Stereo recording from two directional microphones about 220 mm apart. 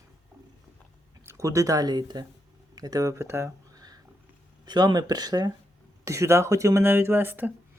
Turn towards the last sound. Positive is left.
turn(degrees=-10)  # may be behind; listen again after turning